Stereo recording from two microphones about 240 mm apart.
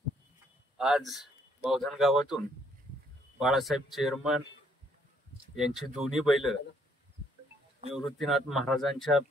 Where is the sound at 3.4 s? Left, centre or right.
Centre.